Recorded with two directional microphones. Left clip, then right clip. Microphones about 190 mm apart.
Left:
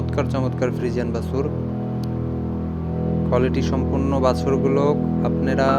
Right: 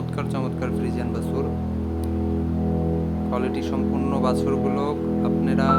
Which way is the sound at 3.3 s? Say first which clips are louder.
Left 5 dB; 25° left (ahead or behind).